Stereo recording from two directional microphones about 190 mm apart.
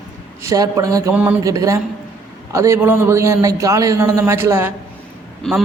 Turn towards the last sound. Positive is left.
turn(degrees=0)  # may be behind; listen again after turning